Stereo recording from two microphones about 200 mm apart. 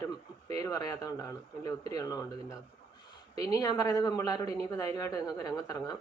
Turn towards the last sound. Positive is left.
turn(degrees=15)  # may be behind; listen again after turning